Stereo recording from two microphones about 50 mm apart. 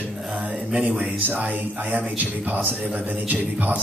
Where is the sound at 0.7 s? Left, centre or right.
Right.